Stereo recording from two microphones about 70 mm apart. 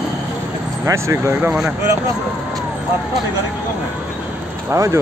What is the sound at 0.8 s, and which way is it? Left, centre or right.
Speech, right.